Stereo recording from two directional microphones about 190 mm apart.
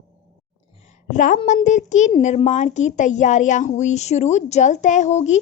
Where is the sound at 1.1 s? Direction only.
40° left (ahead or behind).